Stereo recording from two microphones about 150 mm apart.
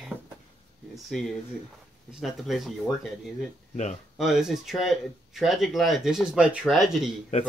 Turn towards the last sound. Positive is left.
turn(degrees=0)  # may be behind; listen again after turning